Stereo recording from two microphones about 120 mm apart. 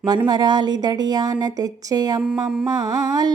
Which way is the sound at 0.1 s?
35° right (ahead or behind).